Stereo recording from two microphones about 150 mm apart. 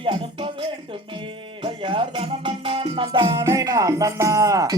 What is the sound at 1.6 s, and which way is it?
Music, 35° right (ahead or behind).